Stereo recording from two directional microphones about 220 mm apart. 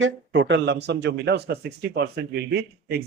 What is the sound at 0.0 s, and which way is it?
Speech, 55° right (ahead or behind).